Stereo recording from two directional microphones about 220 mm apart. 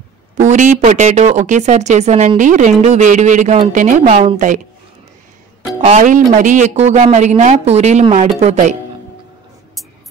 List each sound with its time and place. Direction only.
0.4 s speech: 35° right (ahead or behind)
4.2 s a woman's voice: 25° right (ahead or behind)
5.9 s speech: 35° right (ahead or behind)